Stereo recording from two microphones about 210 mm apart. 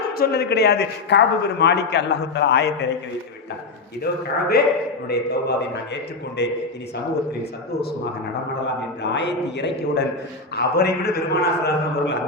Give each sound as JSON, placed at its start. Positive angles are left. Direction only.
{"t": 0.1, "sound": "a man's voice", "side_deg": 45}
{"t": 4.0, "sound": "a man's voice", "side_deg": 50}
{"t": 8.6, "sound": "a man's voice", "side_deg": 55}